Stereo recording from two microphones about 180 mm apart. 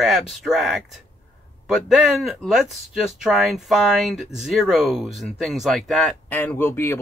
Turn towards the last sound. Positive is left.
turn(degrees=15)  # may be behind; listen again after turning